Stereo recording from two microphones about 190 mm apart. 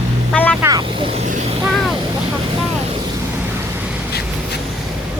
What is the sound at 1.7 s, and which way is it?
Vehicle, centre (ahead or behind).